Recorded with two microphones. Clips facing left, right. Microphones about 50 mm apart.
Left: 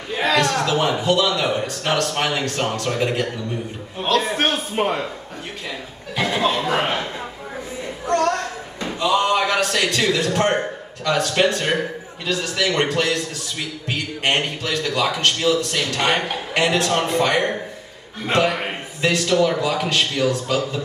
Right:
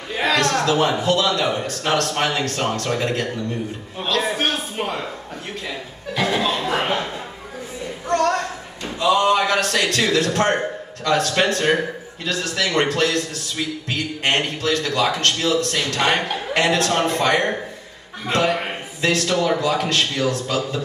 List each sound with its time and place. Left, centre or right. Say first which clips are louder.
0.1 s a man's voice: even; centre
4.4 s a sound: left 3 dB; left
6.1 s a man's voice: left 1 dB; centre
8.1 s a sound: even; centre
9.0 s a man's voice: right 2 dB; centre
18.7 s a man's voice: even; centre